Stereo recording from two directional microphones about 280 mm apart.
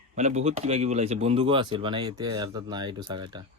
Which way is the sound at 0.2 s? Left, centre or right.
Right.